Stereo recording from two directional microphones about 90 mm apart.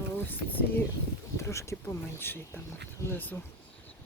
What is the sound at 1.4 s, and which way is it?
Speech, 35° left (ahead or behind).